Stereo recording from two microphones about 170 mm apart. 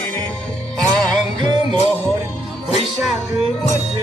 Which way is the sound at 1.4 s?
25° right (ahead or behind).